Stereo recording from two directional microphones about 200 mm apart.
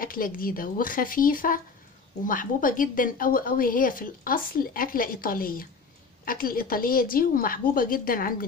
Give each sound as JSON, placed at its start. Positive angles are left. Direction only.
{"t": 0.0, "sound": "a woman's voice", "side_deg": 45}